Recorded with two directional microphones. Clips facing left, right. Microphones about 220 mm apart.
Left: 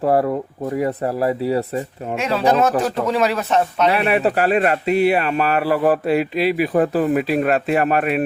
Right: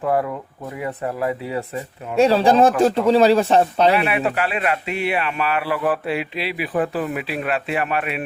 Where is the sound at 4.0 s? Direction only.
35° left (ahead or behind).